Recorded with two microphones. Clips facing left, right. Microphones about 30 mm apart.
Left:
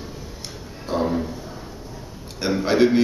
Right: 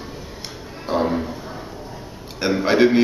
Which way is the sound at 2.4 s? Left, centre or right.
Centre.